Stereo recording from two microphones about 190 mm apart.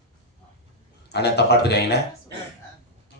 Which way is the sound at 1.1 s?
60° left (ahead or behind).